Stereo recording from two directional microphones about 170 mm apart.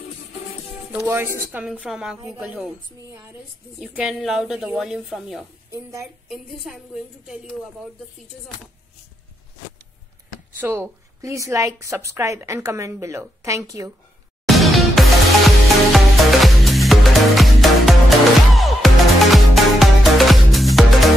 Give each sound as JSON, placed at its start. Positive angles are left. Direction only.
{"t": 1.0, "sound": "a woman's voice", "side_deg": -15}
{"t": 3.8, "sound": "a woman's voice", "side_deg": -5}
{"t": 5.7, "sound": "a woman's voice", "side_deg": -20}
{"t": 6.2, "sound": "a woman's voice", "side_deg": 0}
{"t": 10.6, "sound": "a woman's voice", "side_deg": -15}
{"t": 14.5, "sound": "music", "side_deg": 0}